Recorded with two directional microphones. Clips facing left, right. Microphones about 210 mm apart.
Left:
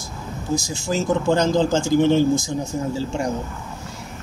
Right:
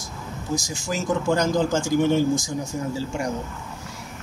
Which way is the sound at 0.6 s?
25° left (ahead or behind).